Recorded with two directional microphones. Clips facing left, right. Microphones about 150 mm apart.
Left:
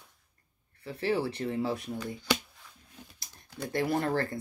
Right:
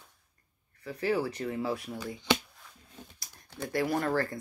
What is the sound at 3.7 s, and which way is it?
Speech, 25° left (ahead or behind).